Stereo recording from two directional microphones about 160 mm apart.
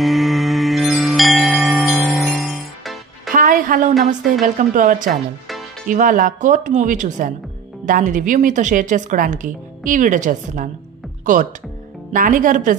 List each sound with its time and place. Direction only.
0.0 s music: centre (ahead or behind)
3.3 s music: 55° right (ahead or behind)
4.6 s a woman's voice: 55° right (ahead or behind)